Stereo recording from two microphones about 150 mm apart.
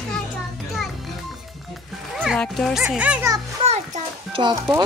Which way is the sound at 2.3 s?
Centre (ahead or behind).